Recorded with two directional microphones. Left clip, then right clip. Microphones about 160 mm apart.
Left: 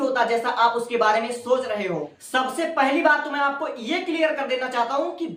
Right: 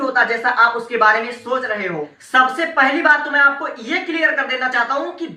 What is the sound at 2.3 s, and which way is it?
A woman's voice, 20° left (ahead or behind).